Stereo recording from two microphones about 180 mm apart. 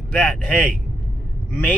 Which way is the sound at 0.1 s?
5° left (ahead or behind).